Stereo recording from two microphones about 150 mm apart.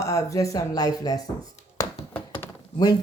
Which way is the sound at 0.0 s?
20° left (ahead or behind).